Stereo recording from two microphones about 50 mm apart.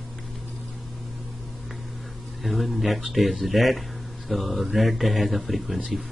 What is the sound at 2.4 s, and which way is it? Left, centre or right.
A man's voice, centre.